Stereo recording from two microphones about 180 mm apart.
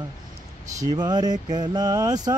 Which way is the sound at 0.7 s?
20° right (ahead or behind).